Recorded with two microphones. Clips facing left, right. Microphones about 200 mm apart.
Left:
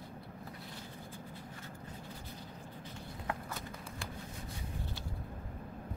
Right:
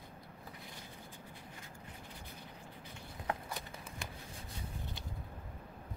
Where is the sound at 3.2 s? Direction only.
20° right (ahead or behind).